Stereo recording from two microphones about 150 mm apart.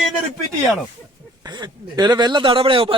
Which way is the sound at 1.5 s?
30° right (ahead or behind).